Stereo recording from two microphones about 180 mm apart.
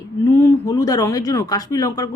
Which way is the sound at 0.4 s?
20° left (ahead or behind).